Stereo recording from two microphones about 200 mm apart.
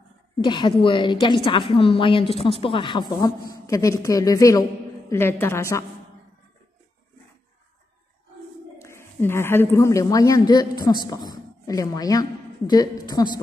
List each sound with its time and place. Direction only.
0.4 s a woman's voice: 20° left (ahead or behind)
8.7 s a woman's voice: 15° left (ahead or behind)